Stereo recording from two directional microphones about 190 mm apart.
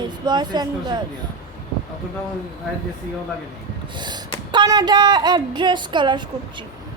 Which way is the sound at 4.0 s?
25° right (ahead or behind).